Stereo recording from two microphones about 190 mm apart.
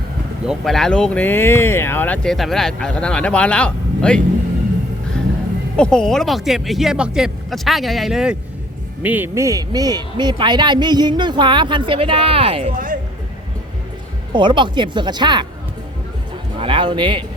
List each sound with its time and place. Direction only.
0.4 s speech: centre (ahead or behind)
5.7 s speech: 5° left (ahead or behind); by 12.7 s 30° right (ahead or behind)
12.7 s speech: 45° right (ahead or behind)
14.3 s speech: 25° right (ahead or behind)
16.6 s speech: 25° right (ahead or behind)